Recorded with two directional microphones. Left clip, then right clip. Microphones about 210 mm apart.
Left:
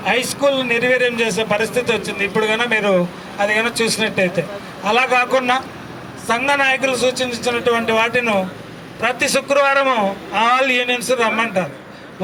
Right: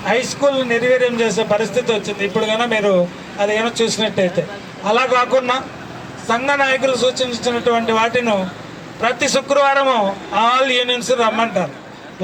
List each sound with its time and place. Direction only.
0.0 s a man's voice: 25° left (ahead or behind)